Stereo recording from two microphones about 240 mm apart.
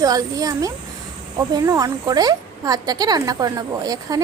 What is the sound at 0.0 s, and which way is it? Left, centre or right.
A woman's voice, centre.